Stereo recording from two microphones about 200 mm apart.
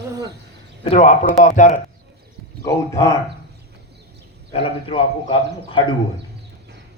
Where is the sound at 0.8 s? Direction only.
35° left (ahead or behind).